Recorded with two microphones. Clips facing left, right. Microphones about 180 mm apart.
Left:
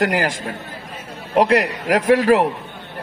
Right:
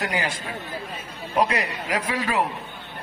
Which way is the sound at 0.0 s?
85° left.